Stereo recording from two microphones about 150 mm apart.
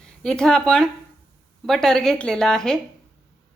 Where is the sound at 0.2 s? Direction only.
5° left (ahead or behind).